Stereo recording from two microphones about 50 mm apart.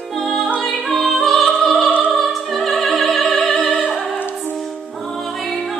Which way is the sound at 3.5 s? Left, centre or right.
Left.